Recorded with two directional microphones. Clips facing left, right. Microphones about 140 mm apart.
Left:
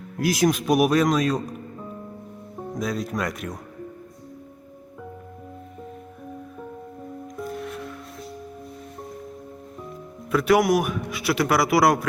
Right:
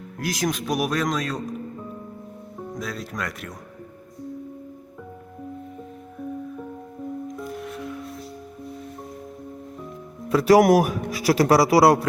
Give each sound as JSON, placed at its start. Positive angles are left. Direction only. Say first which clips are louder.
{"t": 0.2, "sound": "speech", "louder": "left 5 dB", "side_deg": 10}
{"t": 2.7, "sound": "speech", "louder": "left 6 dB", "side_deg": 15}
{"t": 10.3, "sound": "a man's voice", "louder": "right 4 dB", "side_deg": -35}